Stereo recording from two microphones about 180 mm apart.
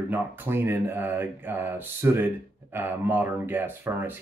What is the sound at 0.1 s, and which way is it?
Speech, 10° right (ahead or behind).